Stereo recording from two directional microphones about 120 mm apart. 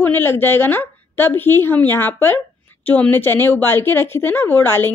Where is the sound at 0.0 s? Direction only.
20° left (ahead or behind).